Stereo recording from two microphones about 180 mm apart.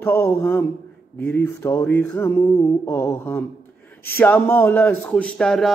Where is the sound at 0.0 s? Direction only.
15° left (ahead or behind).